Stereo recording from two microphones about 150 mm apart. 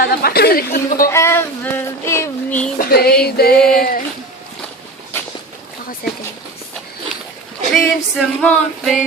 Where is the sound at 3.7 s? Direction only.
80° left.